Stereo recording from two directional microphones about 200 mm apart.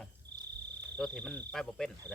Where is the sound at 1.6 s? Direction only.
Centre (ahead or behind).